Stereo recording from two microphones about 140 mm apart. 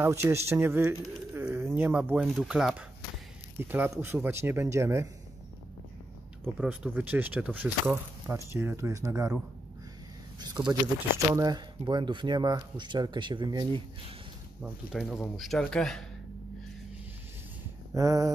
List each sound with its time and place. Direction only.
0.0 s speech: 20° right (ahead or behind)
6.4 s speech: 10° right (ahead or behind)
10.4 s speech: 30° right (ahead or behind)
14.6 s speech: centre (ahead or behind)
17.9 s a sound: 25° right (ahead or behind)